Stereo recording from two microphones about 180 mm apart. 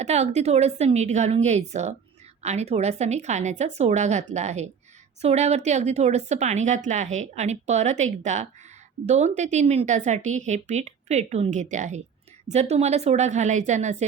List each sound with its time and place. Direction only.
0.0 s speech: 40° right (ahead or behind)